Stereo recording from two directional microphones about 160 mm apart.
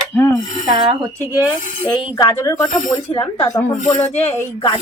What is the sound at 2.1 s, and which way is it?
Speech, 30° left (ahead or behind).